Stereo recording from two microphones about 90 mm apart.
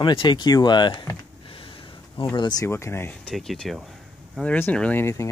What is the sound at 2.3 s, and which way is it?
Speech, 50° left (ahead or behind).